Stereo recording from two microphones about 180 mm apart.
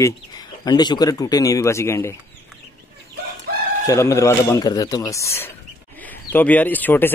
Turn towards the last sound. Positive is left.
turn(degrees=10)  # may be behind; listen again after turning